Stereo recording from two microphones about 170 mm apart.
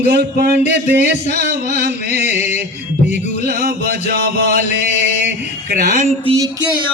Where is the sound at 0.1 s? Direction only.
60° right (ahead or behind).